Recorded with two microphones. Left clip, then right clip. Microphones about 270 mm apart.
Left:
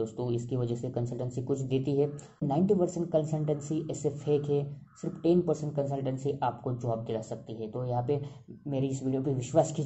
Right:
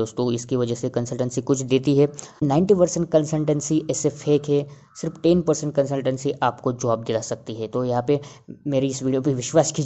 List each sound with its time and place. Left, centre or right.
0.0 s speech: right